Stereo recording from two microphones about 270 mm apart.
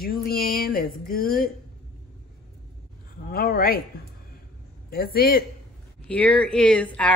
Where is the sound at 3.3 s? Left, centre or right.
Left.